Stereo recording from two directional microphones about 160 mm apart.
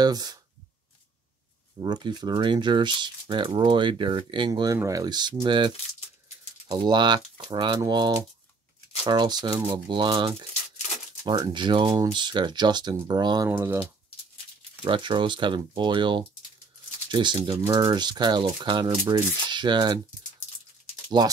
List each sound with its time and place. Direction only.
0.0 s speech: 25° right (ahead or behind)
1.8 s speech: 25° right (ahead or behind)
6.7 s speech: 25° right (ahead or behind)
13.5 s speech: 15° right (ahead or behind)
14.9 s speech: 30° right (ahead or behind)